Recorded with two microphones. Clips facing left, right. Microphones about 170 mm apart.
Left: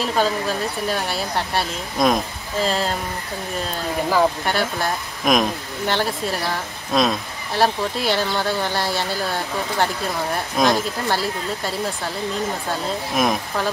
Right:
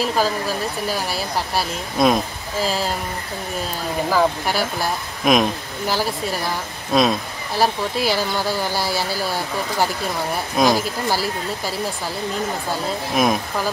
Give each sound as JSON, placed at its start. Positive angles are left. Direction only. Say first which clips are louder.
{"t": 0.0, "sound": "speech", "louder": "even", "side_deg": -5}
{"t": 4.1, "sound": "speech", "louder": "even", "side_deg": -5}
{"t": 13.1, "sound": "speech", "louder": "right 2 dB", "side_deg": 0}